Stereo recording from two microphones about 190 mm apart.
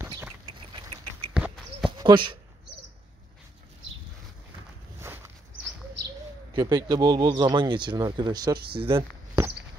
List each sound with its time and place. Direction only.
0.2 s bird: 20° right (ahead or behind)
1.3 s horse: 5° right (ahead or behind)
1.9 s a sound: 25° right (ahead or behind)
6.5 s speech: 20° right (ahead or behind)
8.5 s speech: 55° right (ahead or behind)
8.8 s a sound: 10° right (ahead or behind)